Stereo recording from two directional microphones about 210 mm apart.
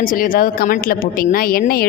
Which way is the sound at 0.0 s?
40° left (ahead or behind).